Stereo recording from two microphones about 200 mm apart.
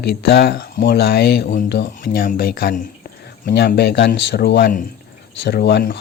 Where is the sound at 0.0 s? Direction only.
55° left (ahead or behind).